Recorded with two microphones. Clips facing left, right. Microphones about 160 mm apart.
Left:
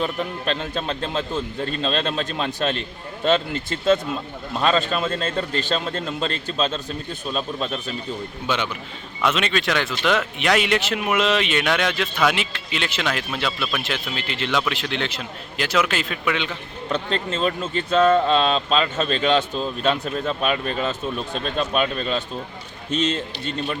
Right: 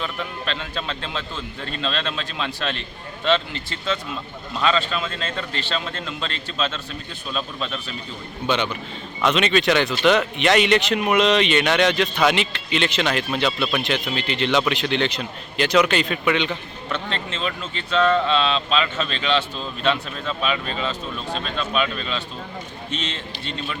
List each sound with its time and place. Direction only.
0.0 s a man's voice: 40° left (ahead or behind)
8.4 s speech: 5° left (ahead or behind)
16.9 s speech: 40° left (ahead or behind)